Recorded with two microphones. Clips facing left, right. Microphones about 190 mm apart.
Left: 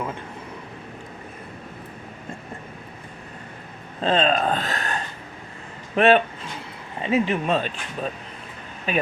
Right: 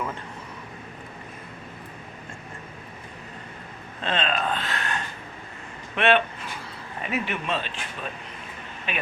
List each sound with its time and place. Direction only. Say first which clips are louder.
4.0 s speech: left 6 dB; 35° left (ahead or behind)
7.0 s speech: left 8 dB; 30° left (ahead or behind)
7.4 s speech: left 6 dB; 45° left (ahead or behind)